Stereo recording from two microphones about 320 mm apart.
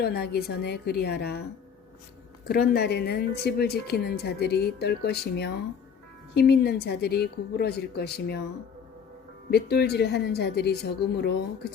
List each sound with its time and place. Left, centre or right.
0.0 s a woman's voice: left
2.5 s a woman's voice: left
9.5 s a woman's voice: left